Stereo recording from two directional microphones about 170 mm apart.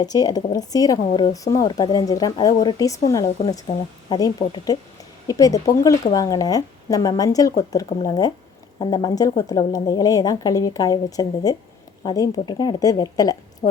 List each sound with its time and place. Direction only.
0.0 s speech: 25° left (ahead or behind)